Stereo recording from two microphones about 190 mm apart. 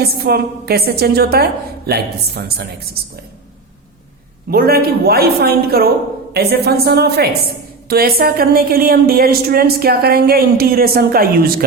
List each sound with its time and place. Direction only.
0.0 s a woman's voice: 55° right (ahead or behind)
4.5 s a woman's voice: 55° right (ahead or behind)